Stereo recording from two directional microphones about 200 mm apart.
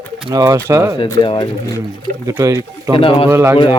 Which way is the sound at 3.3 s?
10° right (ahead or behind).